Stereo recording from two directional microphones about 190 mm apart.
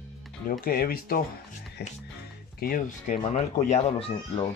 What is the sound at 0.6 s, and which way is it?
Speech, 50° left (ahead or behind).